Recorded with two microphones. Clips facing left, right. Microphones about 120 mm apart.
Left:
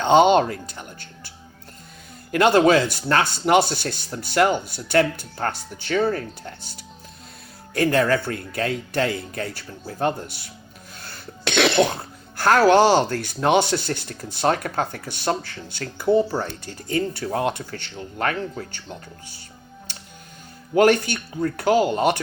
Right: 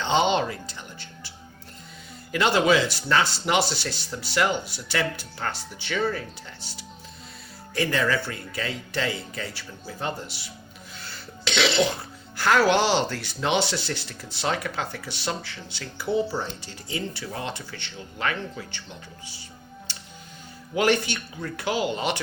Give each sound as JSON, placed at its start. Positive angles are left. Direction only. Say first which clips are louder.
{"t": 0.0, "sound": "music", "louder": "left 7 dB", "side_deg": 50}
{"t": 2.3, "sound": "speech", "louder": "left 5 dB", "side_deg": 50}
{"t": 11.0, "sound": "cough", "louder": "left 4 dB", "side_deg": 55}
{"t": 12.4, "sound": "speech", "louder": "left 5 dB", "side_deg": 45}
{"t": 20.7, "sound": "speech", "louder": "left 6 dB", "side_deg": 50}